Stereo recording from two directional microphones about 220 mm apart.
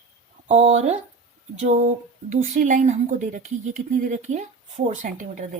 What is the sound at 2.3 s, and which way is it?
A woman's voice, 35° right (ahead or behind).